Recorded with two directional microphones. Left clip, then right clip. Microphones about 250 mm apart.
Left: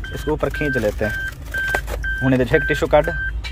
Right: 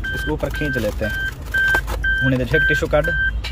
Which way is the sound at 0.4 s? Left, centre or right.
Centre.